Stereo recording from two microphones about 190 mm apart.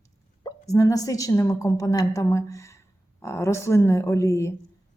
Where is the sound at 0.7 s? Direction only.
20° left (ahead or behind).